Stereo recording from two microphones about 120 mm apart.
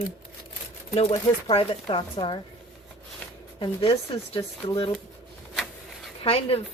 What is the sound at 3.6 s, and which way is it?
Speech, 50° left (ahead or behind).